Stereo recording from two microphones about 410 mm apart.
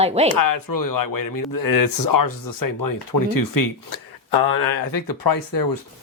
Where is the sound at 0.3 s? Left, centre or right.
Left.